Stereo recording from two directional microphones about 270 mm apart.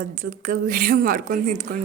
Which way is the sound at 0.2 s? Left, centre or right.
Right.